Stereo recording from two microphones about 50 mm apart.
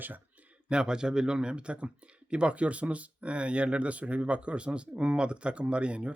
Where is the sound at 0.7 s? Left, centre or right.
Centre.